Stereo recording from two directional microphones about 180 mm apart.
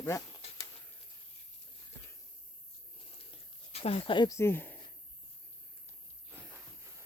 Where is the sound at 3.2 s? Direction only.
35° left (ahead or behind); by 4.8 s 10° left (ahead or behind).